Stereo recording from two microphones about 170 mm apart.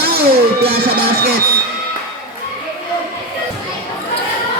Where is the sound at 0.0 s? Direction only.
70° right (ahead or behind).